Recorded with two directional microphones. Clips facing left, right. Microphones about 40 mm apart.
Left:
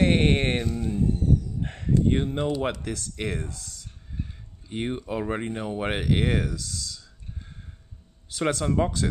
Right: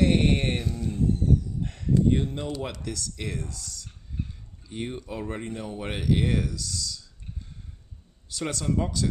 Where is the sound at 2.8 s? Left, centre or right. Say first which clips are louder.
Left 3 dB; left.